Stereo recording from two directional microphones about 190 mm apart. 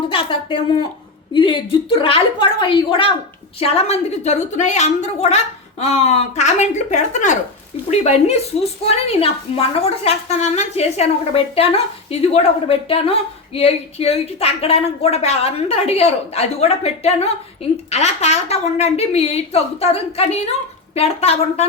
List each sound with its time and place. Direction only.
0.1 s a woman's voice: 30° left (ahead or behind)